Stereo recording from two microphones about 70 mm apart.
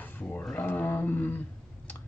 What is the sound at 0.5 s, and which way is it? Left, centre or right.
Speech, left.